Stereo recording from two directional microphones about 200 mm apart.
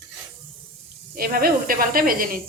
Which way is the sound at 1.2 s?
45° right (ahead or behind).